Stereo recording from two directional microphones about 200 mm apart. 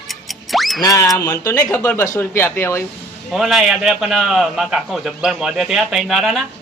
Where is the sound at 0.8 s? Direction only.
15° left (ahead or behind).